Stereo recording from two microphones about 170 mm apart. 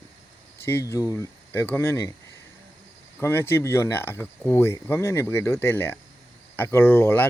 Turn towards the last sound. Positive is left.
turn(degrees=10)  # may be behind; listen again after turning